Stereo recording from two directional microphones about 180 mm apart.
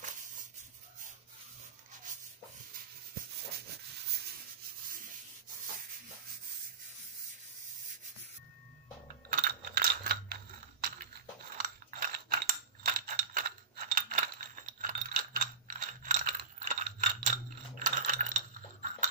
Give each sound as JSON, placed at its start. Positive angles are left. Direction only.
{"t": 9.3, "sound": "a sound", "side_deg": -55}
{"t": 11.5, "sound": "typing", "side_deg": -50}
{"t": 17.7, "sound": "coin", "side_deg": -45}